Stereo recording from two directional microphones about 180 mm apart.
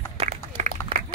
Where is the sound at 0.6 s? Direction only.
40° right (ahead or behind).